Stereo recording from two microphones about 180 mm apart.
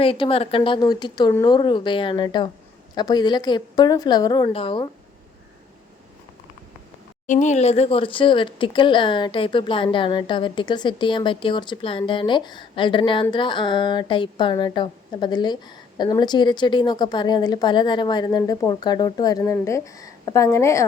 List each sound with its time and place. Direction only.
0.0 s speech: 30° left (ahead or behind)
7.3 s speech: 45° left (ahead or behind); by 20.8 s 15° left (ahead or behind)